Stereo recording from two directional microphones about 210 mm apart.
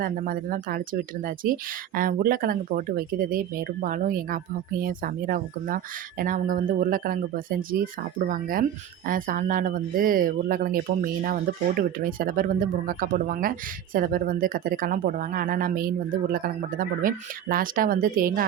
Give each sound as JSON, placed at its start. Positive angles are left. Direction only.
{"t": 0.0, "sound": "speech", "side_deg": -45}